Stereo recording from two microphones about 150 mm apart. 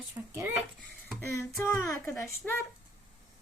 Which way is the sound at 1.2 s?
15° left (ahead or behind).